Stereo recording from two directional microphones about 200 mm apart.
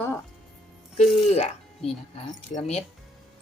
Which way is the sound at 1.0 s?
35° left (ahead or behind).